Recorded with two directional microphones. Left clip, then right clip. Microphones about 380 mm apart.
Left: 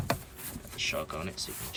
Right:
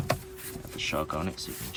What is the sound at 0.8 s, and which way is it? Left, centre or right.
Speech, centre.